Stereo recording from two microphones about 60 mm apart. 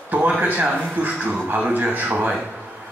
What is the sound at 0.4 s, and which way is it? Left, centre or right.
A man's voice, right.